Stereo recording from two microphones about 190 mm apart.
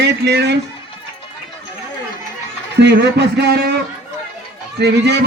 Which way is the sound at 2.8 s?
65° right (ahead or behind).